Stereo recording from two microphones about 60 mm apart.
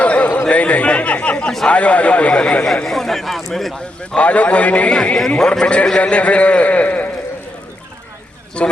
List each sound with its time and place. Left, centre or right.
0.0 s chatter: left
1.6 s a man's voice: left
2.8 s speech: centre
4.1 s a man's voice: left
4.9 s a man's voice: centre
8.6 s speech: centre